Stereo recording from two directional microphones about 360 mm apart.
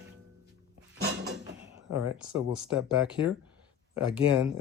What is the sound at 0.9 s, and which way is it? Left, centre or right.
Cupboard open or close, right.